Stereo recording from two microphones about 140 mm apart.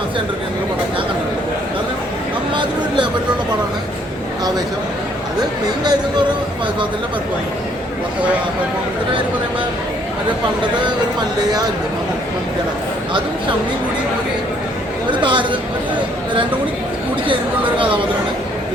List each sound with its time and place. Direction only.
2.6 s a sound: 35° right (ahead or behind)
5.8 s speech: 30° right (ahead or behind)
15.2 s speech: 35° right (ahead or behind)
17.7 s speech: 35° right (ahead or behind)